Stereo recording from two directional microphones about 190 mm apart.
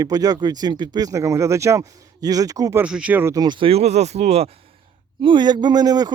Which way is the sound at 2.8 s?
5° right (ahead or behind).